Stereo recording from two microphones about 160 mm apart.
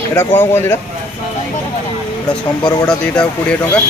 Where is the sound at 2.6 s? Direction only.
25° left (ahead or behind).